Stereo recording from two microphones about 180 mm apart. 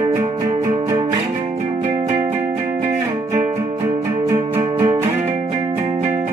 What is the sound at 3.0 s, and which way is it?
Music, 25° right (ahead or behind).